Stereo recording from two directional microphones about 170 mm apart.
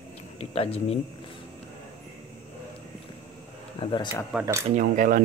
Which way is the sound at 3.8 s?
30° left (ahead or behind).